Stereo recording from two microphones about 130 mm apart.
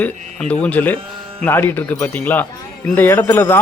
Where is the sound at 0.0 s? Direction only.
10° left (ahead or behind).